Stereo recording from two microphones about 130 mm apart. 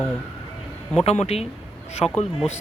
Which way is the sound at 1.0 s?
55° left (ahead or behind).